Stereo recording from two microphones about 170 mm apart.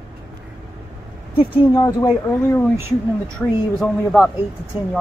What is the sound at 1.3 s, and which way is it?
Speech, 30° left (ahead or behind).